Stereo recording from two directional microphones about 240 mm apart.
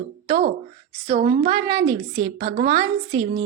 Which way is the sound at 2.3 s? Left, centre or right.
Right.